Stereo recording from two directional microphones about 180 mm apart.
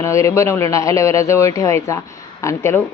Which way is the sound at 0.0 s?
15° left (ahead or behind).